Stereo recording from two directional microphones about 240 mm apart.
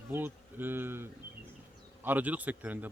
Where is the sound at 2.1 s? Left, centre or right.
Centre.